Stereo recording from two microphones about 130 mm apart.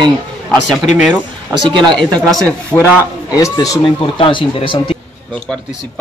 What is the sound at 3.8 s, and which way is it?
Speech, 40° left (ahead or behind).